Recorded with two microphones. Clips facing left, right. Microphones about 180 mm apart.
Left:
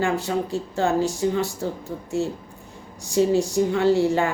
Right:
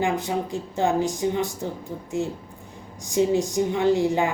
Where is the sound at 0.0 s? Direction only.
15° right (ahead or behind).